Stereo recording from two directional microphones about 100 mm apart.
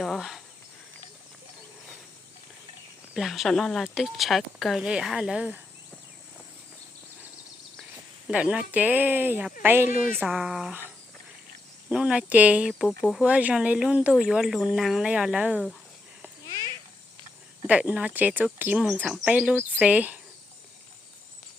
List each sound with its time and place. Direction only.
0.0 s cricket: centre (ahead or behind)
3.2 s speech: centre (ahead or behind)
8.3 s speech: 10° right (ahead or behind)
10.2 s speech: 5° right (ahead or behind)
11.9 s speech: 10° right (ahead or behind)
17.7 s speech: 10° right (ahead or behind)